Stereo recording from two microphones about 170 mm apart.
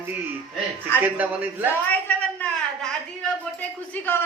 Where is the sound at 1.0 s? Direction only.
10° right (ahead or behind).